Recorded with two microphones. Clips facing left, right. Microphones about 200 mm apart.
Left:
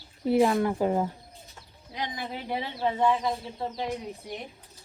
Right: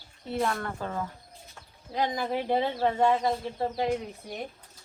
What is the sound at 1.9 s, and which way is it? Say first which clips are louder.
Speech: right 6 dB; 50° right (ahead or behind).